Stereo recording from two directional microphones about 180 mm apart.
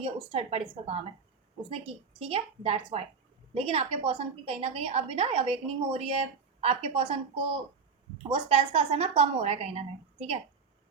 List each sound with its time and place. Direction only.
0.0 s a woman's voice: 35° right (ahead or behind)